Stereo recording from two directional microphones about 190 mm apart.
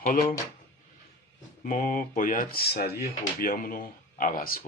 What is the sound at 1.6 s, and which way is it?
Speech, 45° left (ahead or behind).